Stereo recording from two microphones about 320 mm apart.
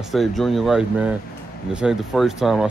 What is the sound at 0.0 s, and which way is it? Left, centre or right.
Speech, centre.